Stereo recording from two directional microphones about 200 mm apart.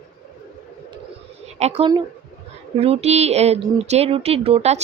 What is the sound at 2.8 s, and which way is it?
Speech, 30° right (ahead or behind).